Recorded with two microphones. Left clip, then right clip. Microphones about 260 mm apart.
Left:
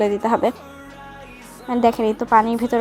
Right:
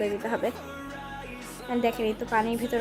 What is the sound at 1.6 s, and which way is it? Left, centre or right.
A woman's voice, centre.